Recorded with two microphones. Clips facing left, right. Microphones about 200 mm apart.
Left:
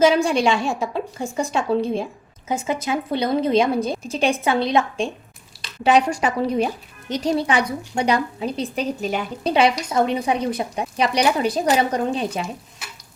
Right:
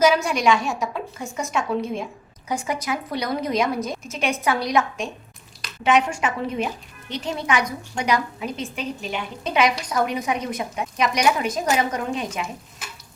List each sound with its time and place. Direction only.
0.0 s a woman's voice: 30° left (ahead or behind)